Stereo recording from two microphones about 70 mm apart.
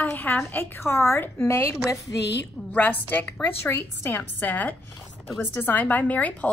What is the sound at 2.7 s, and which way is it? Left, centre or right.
A woman's voice, left.